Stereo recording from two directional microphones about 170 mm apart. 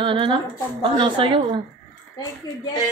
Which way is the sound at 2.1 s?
25° left (ahead or behind).